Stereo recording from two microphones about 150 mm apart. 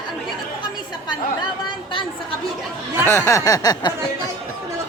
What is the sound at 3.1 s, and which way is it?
Speech, 20° left (ahead or behind).